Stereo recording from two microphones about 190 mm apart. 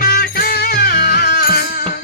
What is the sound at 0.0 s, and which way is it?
Music, 50° left (ahead or behind).